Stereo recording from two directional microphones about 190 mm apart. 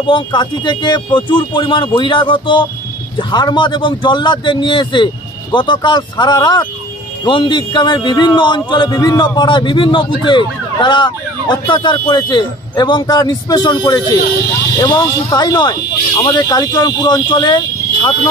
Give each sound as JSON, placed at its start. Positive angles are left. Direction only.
{"t": 0.0, "sound": "a man's voice", "side_deg": 25}